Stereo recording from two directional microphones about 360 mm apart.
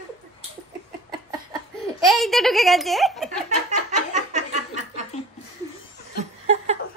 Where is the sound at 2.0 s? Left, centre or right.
Centre.